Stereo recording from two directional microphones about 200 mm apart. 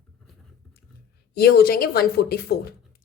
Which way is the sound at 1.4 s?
50° left (ahead or behind).